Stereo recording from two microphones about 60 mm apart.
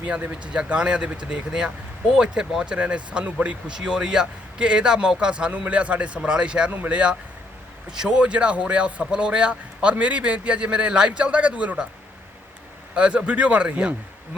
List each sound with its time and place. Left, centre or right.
0.0 s a man's voice: right
12.9 s speech: centre